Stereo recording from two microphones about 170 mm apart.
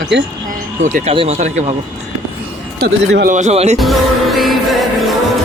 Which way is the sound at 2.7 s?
65° right (ahead or behind).